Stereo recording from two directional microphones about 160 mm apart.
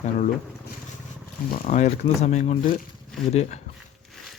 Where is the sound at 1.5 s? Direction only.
50° left (ahead or behind).